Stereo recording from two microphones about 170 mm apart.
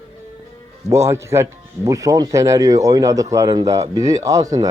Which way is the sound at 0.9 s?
15° right (ahead or behind).